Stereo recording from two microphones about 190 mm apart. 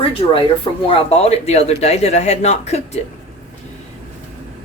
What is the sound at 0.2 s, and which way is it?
Speech, 30° left (ahead or behind).